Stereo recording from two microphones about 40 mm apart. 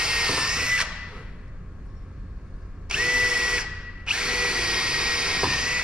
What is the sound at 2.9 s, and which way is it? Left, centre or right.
Drill, right.